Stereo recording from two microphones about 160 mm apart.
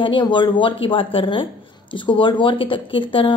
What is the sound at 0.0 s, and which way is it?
A woman's voice, 30° left (ahead or behind).